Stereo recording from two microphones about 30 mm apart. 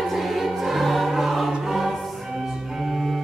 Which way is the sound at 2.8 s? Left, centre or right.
Centre.